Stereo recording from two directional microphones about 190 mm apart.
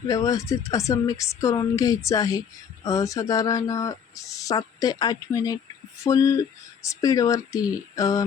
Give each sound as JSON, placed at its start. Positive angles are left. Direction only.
{"t": 0.1, "sound": "speech", "side_deg": 20}